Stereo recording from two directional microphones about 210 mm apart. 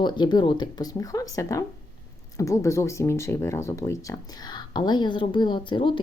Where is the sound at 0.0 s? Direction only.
20° left (ahead or behind).